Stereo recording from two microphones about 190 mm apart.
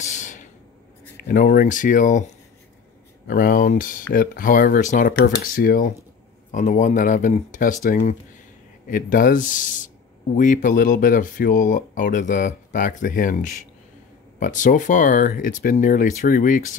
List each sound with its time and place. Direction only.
0.0 s a sound: 40° left (ahead or behind)
1.1 s speech: 45° left (ahead or behind)
3.3 s speech: 45° left (ahead or behind)